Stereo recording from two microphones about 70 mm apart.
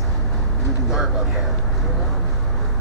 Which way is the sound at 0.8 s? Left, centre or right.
Centre.